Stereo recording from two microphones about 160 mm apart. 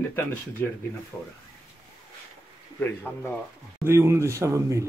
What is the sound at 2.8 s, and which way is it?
Speech, 10° left (ahead or behind).